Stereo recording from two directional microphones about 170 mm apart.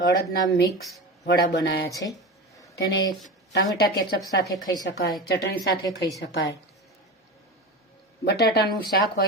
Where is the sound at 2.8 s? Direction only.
90° left.